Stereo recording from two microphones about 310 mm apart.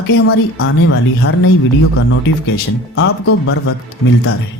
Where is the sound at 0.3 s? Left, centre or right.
Left.